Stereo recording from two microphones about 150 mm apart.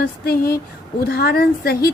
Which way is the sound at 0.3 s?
90° left.